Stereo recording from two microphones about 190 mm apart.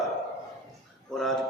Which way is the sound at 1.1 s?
Centre (ahead or behind).